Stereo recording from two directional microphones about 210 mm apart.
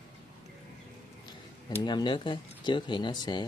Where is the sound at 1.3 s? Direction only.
20° left (ahead or behind).